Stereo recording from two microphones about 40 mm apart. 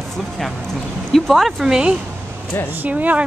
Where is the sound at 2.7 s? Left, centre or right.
Right.